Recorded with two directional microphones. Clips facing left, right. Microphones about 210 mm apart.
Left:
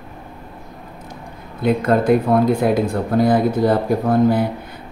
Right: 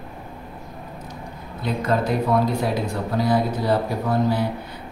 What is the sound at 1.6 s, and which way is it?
Speech, 50° left (ahead or behind).